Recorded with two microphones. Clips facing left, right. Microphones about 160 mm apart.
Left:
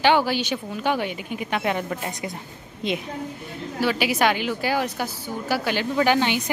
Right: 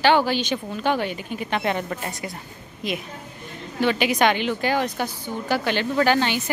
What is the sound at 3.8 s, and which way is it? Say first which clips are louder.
A woman's voice: right 2 dB; 5° left (ahead or behind).